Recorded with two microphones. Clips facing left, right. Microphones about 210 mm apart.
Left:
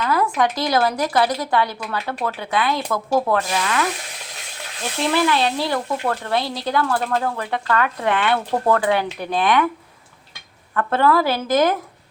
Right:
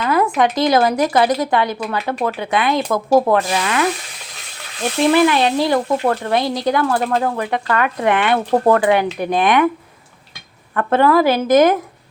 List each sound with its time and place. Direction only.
0.0 s speech: 20° right (ahead or behind)
3.1 s speech: 40° right (ahead or behind)
3.3 s speech: 20° right (ahead or behind)
5.1 s speech: 15° right (ahead or behind)
10.8 s speech: 20° right (ahead or behind)